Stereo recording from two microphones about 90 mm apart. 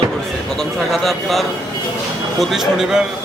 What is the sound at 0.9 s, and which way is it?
A man's voice, centre (ahead or behind).